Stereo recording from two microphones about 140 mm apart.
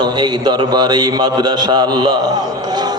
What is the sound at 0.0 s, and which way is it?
A man's voice, 30° right (ahead or behind).